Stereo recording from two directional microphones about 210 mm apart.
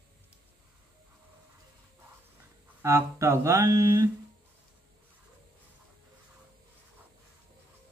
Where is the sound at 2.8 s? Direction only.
15° right (ahead or behind).